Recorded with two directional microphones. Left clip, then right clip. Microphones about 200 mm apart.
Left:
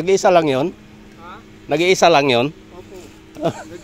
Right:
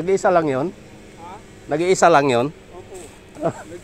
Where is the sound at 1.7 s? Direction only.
15° left (ahead or behind).